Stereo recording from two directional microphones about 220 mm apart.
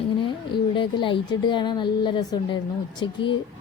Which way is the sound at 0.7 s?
20° left (ahead or behind).